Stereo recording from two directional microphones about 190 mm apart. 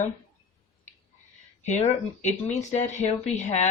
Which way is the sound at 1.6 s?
35° left (ahead or behind).